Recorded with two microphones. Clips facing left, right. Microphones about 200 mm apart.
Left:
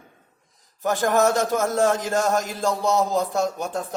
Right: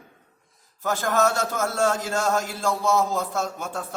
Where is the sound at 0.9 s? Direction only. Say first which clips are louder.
Left 3 dB; 15° left (ahead or behind).